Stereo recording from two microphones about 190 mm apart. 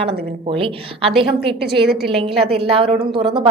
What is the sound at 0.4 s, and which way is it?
Speech, 30° right (ahead or behind).